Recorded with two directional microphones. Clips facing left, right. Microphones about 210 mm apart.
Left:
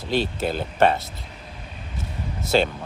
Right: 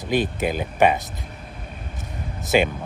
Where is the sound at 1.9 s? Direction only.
20° right (ahead or behind).